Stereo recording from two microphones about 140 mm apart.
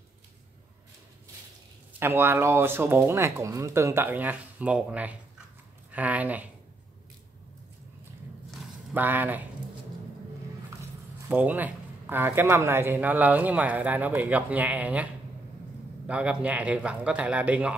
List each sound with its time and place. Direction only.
2.0 s a man's voice: 15° right (ahead or behind)
8.9 s a man's voice: 15° right (ahead or behind)
11.2 s a man's voice: 10° right (ahead or behind)
16.1 s a man's voice: 10° right (ahead or behind)